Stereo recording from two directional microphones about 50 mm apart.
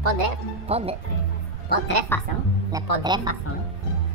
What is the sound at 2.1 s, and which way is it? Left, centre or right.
Speech, left.